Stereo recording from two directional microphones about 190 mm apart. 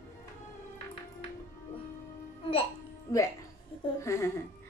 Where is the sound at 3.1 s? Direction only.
15° left (ahead or behind).